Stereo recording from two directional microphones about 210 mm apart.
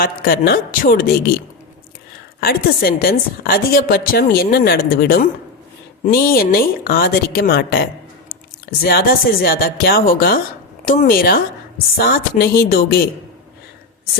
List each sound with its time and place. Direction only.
0.0 s a woman's voice: 45° left (ahead or behind)
2.4 s a woman's voice: 45° left (ahead or behind)